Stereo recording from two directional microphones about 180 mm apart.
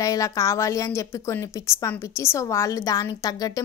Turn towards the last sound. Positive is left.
turn(degrees=20)  # may be behind; listen again after turning